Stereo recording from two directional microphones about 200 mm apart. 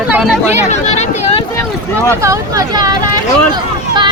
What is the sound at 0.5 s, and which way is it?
Speech, 35° left (ahead or behind).